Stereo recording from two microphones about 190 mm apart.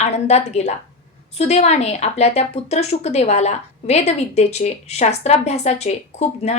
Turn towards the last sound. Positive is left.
turn(degrees=35)  # may be behind; listen again after turning